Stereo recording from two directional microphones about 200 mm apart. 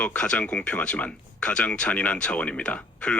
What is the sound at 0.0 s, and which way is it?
Speech, 5° left (ahead or behind).